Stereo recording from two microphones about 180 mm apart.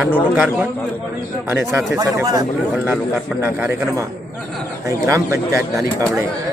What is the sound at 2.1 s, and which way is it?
Speech, 20° right (ahead or behind).